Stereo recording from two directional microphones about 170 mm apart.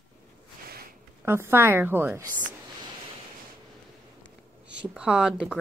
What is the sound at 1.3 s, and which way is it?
Speech, 15° right (ahead or behind).